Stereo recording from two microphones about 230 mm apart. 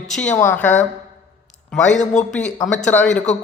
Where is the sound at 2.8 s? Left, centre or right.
Centre.